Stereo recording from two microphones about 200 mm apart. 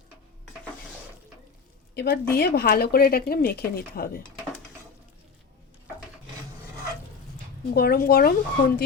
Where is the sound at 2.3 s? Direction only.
50° left (ahead or behind).